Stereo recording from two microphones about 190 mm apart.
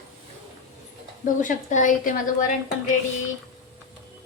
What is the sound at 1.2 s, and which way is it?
A woman's voice, 40° left (ahead or behind).